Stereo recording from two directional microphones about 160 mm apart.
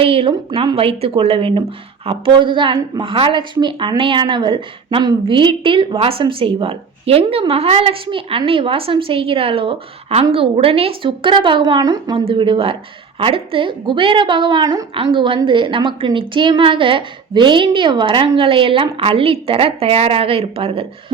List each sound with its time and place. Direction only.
0.0 s speech: 35° right (ahead or behind)